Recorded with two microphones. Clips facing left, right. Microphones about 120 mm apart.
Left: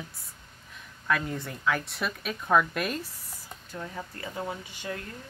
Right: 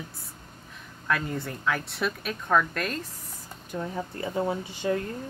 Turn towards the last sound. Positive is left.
turn(degrees=-30)  # may be behind; listen again after turning